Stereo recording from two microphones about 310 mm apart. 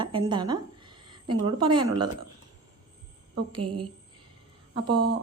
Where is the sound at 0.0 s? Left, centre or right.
Centre.